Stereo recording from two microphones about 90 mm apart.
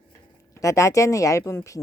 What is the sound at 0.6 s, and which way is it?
Speech, 35° left (ahead or behind).